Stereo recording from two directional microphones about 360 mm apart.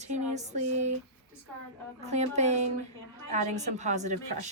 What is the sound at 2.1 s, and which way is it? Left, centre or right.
A woman's voice, centre.